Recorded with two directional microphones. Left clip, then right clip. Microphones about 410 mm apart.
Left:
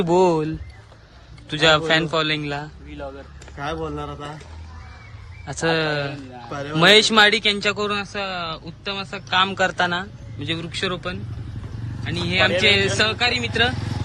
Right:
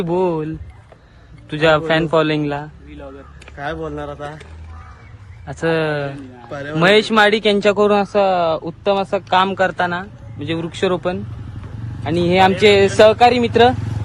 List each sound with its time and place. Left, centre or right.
0.0 s speech: centre
5.5 s speech: centre
13.7 s vehicle: centre